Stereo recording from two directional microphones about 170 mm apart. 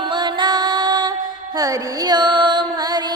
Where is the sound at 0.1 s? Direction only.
25° right (ahead or behind).